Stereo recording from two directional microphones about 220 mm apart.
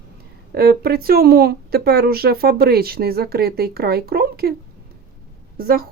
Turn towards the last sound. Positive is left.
turn(degrees=-40)  # may be behind; listen again after turning